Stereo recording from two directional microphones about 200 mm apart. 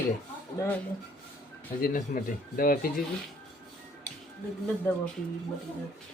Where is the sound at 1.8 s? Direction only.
45° left (ahead or behind).